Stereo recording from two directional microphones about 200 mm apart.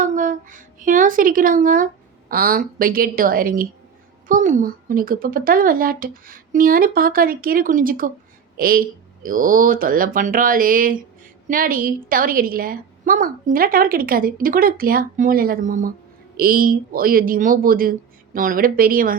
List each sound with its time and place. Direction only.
0.0 s a woman's voice: 40° right (ahead or behind)